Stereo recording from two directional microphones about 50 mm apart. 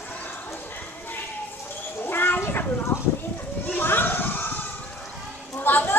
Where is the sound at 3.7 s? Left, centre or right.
Left.